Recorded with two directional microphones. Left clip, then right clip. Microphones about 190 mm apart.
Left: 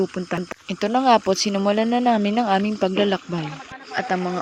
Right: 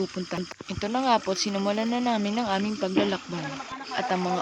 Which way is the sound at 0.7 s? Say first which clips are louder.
Left 7 dB; 35° left (ahead or behind).